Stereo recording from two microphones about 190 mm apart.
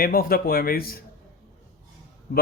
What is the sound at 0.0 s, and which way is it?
Speech, 50° left (ahead or behind).